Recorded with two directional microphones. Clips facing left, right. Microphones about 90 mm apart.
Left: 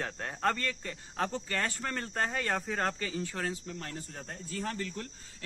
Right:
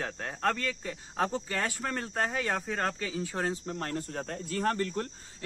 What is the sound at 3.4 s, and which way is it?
Speech, 45° right (ahead or behind).